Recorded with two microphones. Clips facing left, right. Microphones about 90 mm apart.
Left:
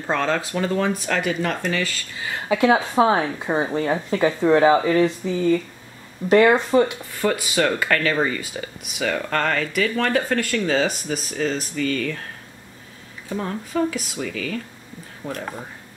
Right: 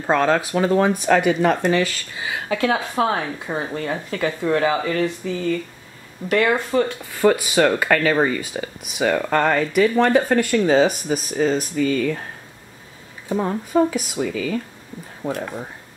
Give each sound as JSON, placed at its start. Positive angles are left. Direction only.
{"t": 0.1, "sound": "speech", "side_deg": -15}
{"t": 2.4, "sound": "a woman's voice", "side_deg": 15}
{"t": 7.2, "sound": "speech", "side_deg": -15}
{"t": 13.3, "sound": "speech", "side_deg": -20}
{"t": 15.2, "sound": "speech", "side_deg": -30}